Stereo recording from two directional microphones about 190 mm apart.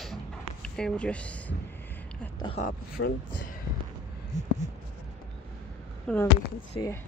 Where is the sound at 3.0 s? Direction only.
80° left.